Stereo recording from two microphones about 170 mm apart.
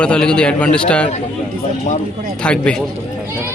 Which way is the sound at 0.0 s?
5° left (ahead or behind).